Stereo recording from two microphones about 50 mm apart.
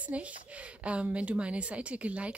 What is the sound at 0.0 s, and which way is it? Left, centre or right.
Speech, right.